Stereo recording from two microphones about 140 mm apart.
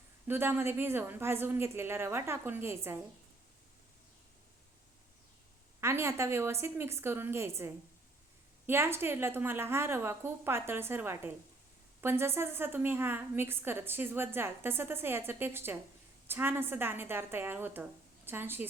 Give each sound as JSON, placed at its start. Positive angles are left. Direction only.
{"t": 0.3, "sound": "a woman's voice", "side_deg": -15}
{"t": 5.8, "sound": "a woman's voice", "side_deg": -20}